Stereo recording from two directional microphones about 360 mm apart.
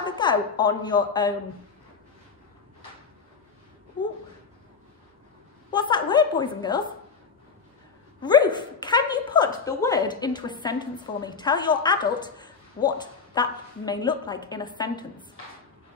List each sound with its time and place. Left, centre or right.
0.0 s a woman's voice: centre
4.0 s a sound: centre
5.7 s a woman's voice: centre
8.2 s a woman's voice: centre